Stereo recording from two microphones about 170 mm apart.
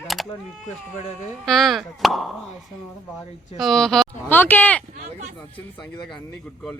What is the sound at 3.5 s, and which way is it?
Speech, centre (ahead or behind).